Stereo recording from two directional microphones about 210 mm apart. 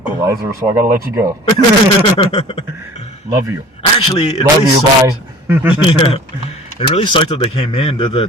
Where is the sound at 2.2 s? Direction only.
30° left (ahead or behind).